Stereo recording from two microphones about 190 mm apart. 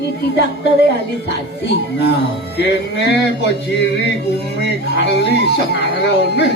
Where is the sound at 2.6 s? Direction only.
60° left (ahead or behind).